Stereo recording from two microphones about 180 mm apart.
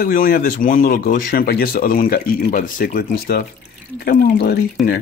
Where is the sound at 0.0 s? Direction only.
55° left (ahead or behind).